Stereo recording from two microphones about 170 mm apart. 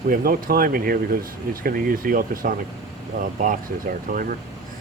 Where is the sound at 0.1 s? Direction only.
55° right (ahead or behind).